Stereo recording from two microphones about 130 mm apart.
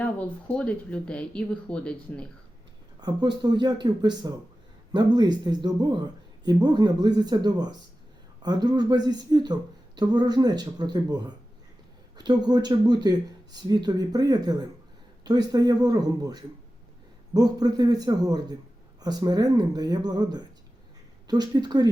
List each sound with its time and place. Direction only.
0.0 s speech: 10° left (ahead or behind)
3.0 s speech: 30° right (ahead or behind)